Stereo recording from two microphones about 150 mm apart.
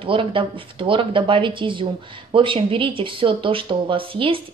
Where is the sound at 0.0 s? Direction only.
35° right (ahead or behind).